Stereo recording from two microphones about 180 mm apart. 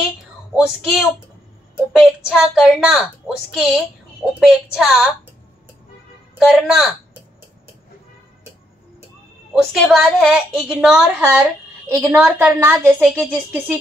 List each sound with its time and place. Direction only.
0.6 s a woman's voice: 5° right (ahead or behind)
6.4 s speech: centre (ahead or behind)
9.5 s a woman's voice: centre (ahead or behind)